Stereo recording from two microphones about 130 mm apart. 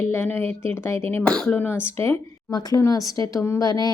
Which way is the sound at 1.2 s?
5° left (ahead or behind).